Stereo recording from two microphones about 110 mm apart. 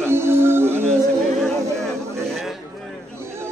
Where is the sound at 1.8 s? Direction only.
Centre (ahead or behind).